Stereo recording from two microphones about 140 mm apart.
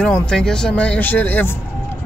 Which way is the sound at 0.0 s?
5° left (ahead or behind).